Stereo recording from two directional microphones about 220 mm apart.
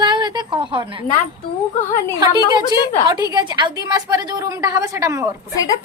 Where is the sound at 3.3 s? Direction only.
20° right (ahead or behind).